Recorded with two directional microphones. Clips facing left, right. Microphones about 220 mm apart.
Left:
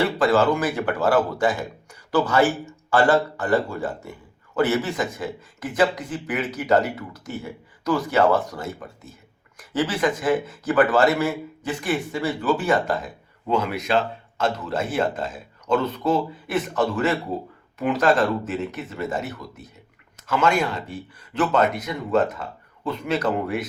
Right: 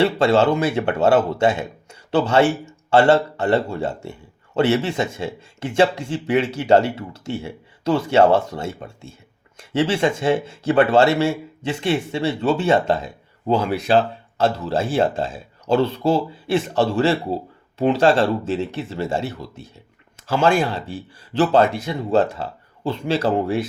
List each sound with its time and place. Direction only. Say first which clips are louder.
0.0 s speech: right 3 dB; 25° right (ahead or behind)